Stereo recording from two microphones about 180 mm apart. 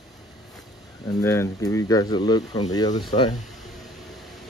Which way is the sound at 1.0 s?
15° left (ahead or behind).